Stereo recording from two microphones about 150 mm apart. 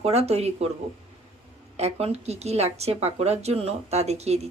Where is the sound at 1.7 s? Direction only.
45° right (ahead or behind).